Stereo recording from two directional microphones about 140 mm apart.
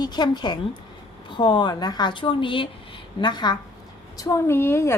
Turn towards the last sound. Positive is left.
turn(degrees=20)  # may be behind; listen again after turning